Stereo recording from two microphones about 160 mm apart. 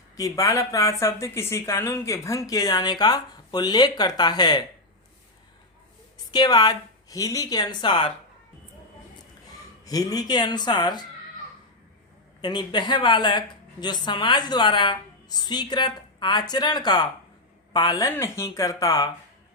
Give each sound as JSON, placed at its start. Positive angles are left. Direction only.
{"t": 0.2, "sound": "speech", "side_deg": 20}
{"t": 6.3, "sound": "speech", "side_deg": 25}
{"t": 9.8, "sound": "speech", "side_deg": 25}
{"t": 12.4, "sound": "speech", "side_deg": 30}